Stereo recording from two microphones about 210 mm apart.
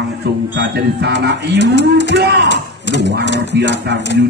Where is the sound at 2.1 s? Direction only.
55° right (ahead or behind).